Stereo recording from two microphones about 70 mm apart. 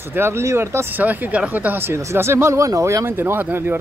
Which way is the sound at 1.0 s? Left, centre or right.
Right.